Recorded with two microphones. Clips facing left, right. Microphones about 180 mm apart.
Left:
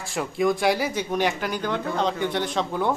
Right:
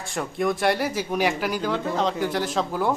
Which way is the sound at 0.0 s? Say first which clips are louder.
Left 2 dB; centre (ahead or behind).